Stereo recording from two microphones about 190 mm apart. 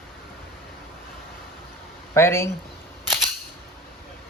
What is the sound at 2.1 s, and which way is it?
Speech, 15° left (ahead or behind).